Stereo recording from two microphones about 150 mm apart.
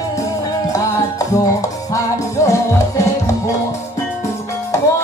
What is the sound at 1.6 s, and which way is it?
Music, 20° left (ahead or behind).